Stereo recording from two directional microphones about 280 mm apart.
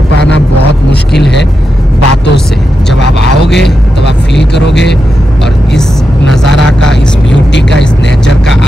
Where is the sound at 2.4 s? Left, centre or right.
Centre.